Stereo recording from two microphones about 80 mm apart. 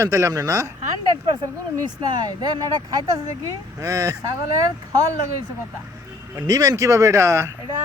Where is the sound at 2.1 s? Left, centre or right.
Right.